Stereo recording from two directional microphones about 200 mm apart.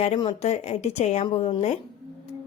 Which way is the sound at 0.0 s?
30° left (ahead or behind).